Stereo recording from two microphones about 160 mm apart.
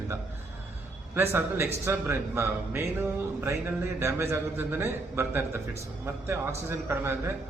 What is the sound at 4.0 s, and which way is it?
A man's voice, 15° right (ahead or behind).